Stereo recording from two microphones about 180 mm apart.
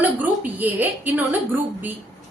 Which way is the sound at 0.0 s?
10° right (ahead or behind).